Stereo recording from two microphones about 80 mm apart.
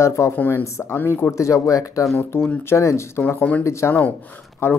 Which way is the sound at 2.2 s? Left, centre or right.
Left.